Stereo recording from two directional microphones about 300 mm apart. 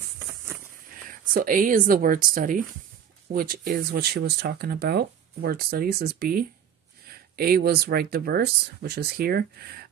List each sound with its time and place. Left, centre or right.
1.0 s speech: right